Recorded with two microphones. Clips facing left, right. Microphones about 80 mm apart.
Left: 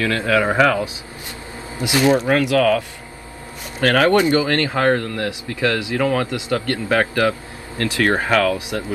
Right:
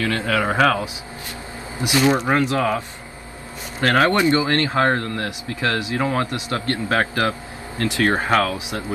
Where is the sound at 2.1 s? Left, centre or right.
Right.